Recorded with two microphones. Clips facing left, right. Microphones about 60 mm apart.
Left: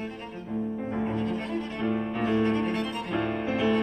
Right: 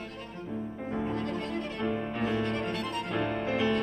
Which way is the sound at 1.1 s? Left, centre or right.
Right.